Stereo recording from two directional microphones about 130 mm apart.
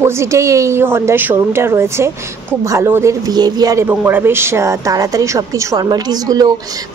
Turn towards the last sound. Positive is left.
turn(degrees=-30)  # may be behind; listen again after turning